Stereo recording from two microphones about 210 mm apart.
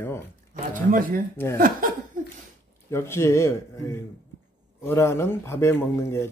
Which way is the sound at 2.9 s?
10° left (ahead or behind).